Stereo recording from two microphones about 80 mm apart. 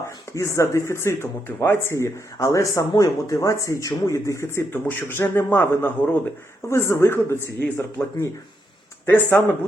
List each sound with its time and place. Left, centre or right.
0.3 s speech: left